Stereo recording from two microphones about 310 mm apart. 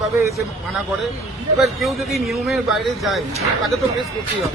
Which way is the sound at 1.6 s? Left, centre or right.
Centre.